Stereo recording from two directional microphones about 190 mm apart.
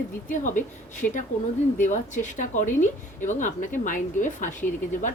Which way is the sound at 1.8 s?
40° left (ahead or behind).